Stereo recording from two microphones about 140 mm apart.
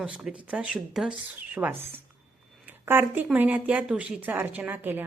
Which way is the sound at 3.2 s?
10° right (ahead or behind).